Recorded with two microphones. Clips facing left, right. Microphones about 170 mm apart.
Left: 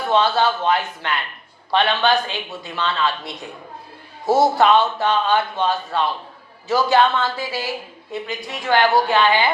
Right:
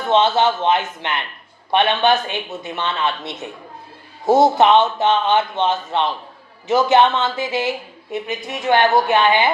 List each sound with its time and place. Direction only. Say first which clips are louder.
0.0 s a woman's voice: right 2 dB; 20° right (ahead or behind)